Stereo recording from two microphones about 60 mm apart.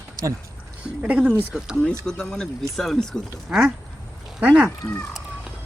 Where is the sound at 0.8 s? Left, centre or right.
Right.